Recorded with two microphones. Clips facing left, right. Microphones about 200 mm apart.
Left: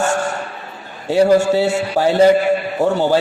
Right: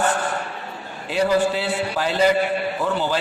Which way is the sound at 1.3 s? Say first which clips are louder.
Left 7 dB; 45° left (ahead or behind).